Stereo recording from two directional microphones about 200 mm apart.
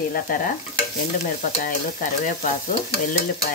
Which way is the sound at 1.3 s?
40° left (ahead or behind).